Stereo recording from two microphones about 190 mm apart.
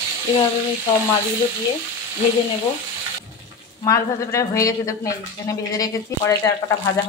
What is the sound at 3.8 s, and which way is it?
Speech, 15° left (ahead or behind).